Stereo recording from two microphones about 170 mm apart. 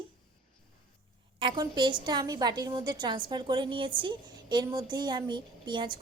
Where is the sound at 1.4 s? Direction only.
25° right (ahead or behind).